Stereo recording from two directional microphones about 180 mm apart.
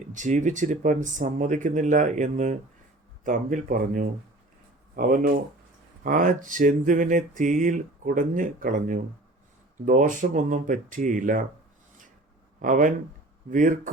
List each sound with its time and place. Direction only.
0.1 s speech: 45° right (ahead or behind)
12.6 s speech: 45° right (ahead or behind)